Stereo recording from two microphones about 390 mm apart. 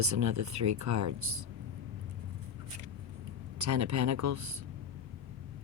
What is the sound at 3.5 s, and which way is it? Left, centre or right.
Speech, right.